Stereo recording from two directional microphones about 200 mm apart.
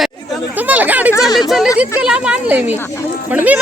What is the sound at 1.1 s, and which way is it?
Speech, 20° left (ahead or behind).